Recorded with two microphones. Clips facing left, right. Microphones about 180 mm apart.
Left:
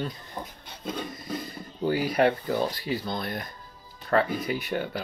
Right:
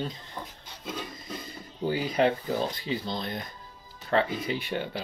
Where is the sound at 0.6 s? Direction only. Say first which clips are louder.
Left 4 dB; 60° left (ahead or behind).